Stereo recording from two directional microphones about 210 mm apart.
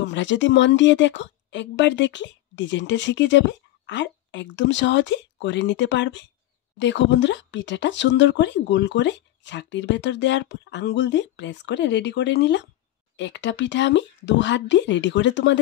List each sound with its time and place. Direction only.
0.0 s speech: 60° left (ahead or behind)